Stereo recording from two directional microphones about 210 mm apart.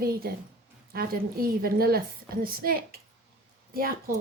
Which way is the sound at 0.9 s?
45° right (ahead or behind).